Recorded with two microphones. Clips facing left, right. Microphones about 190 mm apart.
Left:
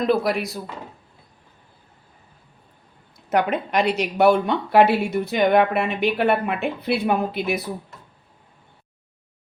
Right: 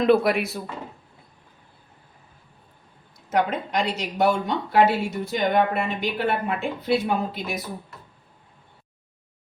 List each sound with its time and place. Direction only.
0.0 s speech: centre (ahead or behind)
3.2 s speech: 65° left (ahead or behind)